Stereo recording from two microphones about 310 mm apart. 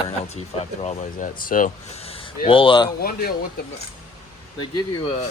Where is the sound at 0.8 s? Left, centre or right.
Left.